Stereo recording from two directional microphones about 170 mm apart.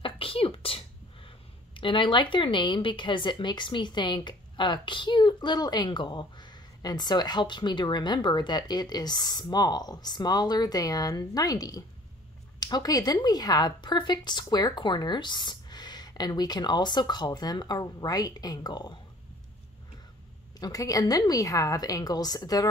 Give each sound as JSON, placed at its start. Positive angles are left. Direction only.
{"t": 0.0, "sound": "a sound", "side_deg": 30}
{"t": 1.7, "sound": "a woman's voice", "side_deg": 30}
{"t": 20.6, "sound": "a woman's voice", "side_deg": 20}